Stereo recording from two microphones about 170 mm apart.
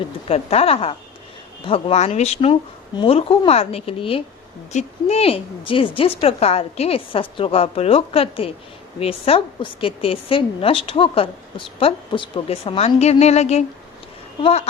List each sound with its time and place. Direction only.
0.3 s a woman's voice: 35° left (ahead or behind)